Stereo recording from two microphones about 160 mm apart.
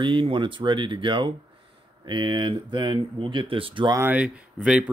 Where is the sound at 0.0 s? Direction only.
30° right (ahead or behind).